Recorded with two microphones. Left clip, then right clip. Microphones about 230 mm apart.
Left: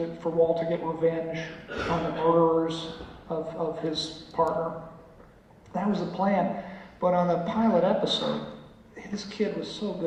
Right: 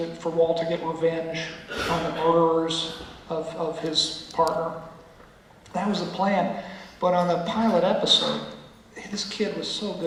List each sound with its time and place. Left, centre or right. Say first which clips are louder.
0.0 s speech: right 1 dB; centre
0.3 s a man's voice: right 1 dB; left
0.5 s speech: right 2 dB; centre
3.2 s a man's voice: right 2 dB; left
3.8 s a man's voice: right 6 dB; centre
4.5 s a man's voice: right 2 dB; centre
5.7 s speech: right 2 dB; centre